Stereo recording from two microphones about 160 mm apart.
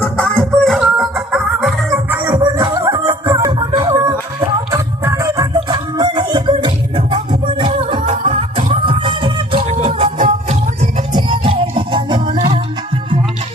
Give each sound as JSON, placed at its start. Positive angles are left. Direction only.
{"t": 0.0, "sound": "music", "side_deg": 5}
{"t": 2.4, "sound": "music", "side_deg": -25}
{"t": 11.1, "sound": "music", "side_deg": -30}